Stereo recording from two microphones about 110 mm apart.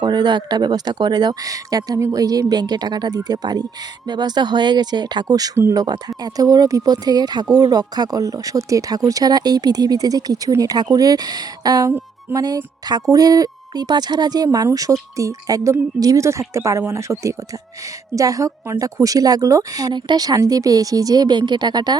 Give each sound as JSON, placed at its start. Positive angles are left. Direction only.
{"t": 0.0, "sound": "speech", "side_deg": -40}